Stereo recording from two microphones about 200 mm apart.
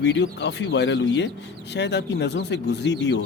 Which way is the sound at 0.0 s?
60° left (ahead or behind).